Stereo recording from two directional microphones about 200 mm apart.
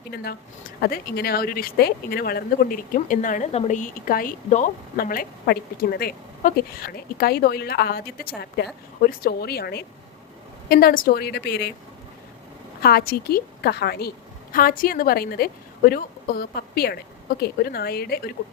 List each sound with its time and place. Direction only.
0.1 s speech: 50° left (ahead or behind)
12.8 s speech: 50° left (ahead or behind)